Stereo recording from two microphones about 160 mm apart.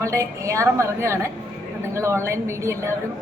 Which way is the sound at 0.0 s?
20° right (ahead or behind).